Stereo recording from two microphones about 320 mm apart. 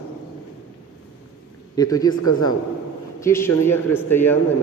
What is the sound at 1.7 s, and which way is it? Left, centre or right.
A man's voice, centre.